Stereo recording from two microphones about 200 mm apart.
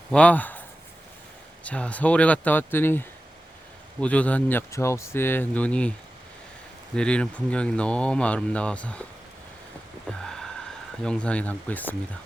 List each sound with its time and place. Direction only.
0.1 s speech: 5° left (ahead or behind)
1.6 s speech: 5° left (ahead or behind)
6.9 s speech: 5° left (ahead or behind)
10.1 s vehicle: 5° left (ahead or behind)
11.0 s speech: 5° left (ahead or behind)